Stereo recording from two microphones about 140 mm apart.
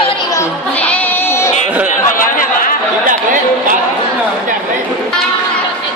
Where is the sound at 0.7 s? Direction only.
10° left (ahead or behind).